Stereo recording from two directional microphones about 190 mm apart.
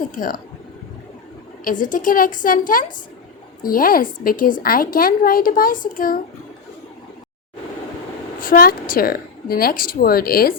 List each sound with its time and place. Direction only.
0.1 s a woman's voice: 45° left (ahead or behind)
1.8 s a woman's voice: 45° left (ahead or behind)
8.4 s a woman's voice: 50° left (ahead or behind)